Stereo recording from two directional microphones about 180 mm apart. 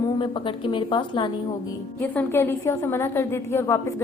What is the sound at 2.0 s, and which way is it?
A woman's voice, 10° left (ahead or behind).